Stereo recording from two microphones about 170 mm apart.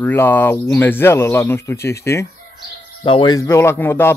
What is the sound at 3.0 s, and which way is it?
Speech, 30° left (ahead or behind).